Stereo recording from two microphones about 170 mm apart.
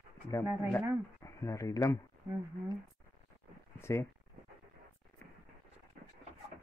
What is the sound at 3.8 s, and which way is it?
Speech, 15° left (ahead or behind).